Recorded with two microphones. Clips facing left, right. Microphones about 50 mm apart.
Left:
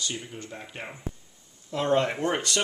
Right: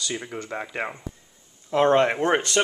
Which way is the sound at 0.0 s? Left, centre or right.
Right.